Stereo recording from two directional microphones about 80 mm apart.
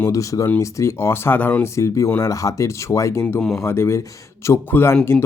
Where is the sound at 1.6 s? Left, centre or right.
Left.